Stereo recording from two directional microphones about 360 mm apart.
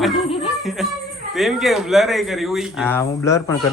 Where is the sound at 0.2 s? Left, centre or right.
Centre.